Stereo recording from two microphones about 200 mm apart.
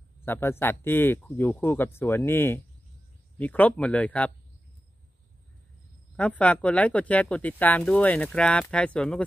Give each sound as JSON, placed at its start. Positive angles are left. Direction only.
{"t": 0.2, "sound": "speech", "side_deg": 10}
{"t": 6.1, "sound": "speech", "side_deg": 5}